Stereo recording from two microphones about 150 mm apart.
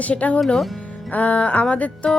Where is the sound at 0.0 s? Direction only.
10° left (ahead or behind).